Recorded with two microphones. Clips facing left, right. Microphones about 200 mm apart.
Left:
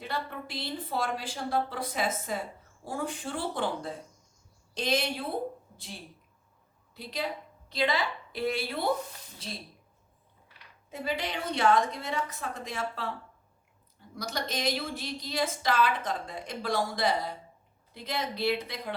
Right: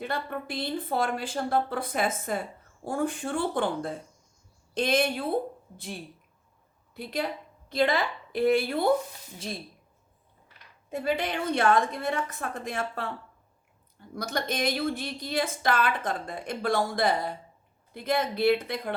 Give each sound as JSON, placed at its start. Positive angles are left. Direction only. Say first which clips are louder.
{"t": 0.0, "sound": "a woman's voice", "louder": "right 4 dB", "side_deg": -50}
{"t": 10.8, "sound": "a woman's voice", "louder": "right 5 dB", "side_deg": -55}
{"t": 14.2, "sound": "a woman's voice", "louder": "right 4 dB", "side_deg": -55}